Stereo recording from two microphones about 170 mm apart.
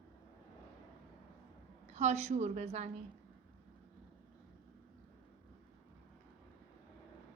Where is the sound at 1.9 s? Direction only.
40° right (ahead or behind).